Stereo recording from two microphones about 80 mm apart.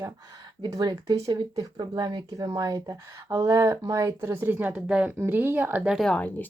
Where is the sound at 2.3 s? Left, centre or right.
Right.